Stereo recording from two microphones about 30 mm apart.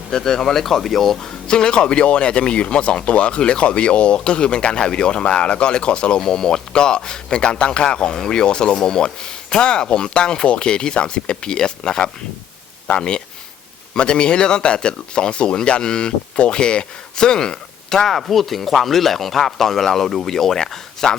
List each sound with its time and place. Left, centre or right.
0.1 s a man's voice: centre
0.6 s speech: centre
1.5 s a man's voice: left
6.2 s a man's voice: centre
18.1 s speech: centre